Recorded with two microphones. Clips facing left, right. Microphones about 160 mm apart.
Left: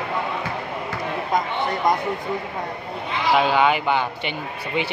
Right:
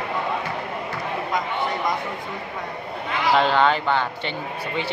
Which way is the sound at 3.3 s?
10° left (ahead or behind).